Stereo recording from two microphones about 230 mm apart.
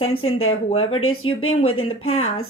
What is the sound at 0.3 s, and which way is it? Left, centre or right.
Speech, left.